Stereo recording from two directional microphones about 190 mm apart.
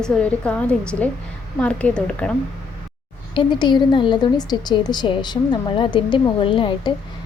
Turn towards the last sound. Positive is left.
turn(degrees=25)  # may be behind; listen again after turning